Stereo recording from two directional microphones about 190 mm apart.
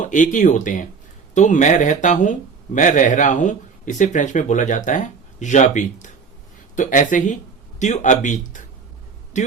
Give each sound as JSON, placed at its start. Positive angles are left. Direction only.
{"t": 0.0, "sound": "speech", "side_deg": 45}